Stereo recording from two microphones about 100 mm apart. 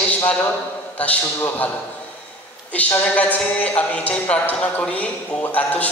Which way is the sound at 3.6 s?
15° left (ahead or behind).